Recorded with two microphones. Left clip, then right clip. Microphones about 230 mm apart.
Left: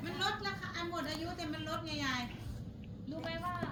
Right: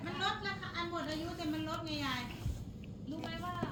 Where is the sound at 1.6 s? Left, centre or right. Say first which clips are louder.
Even; left.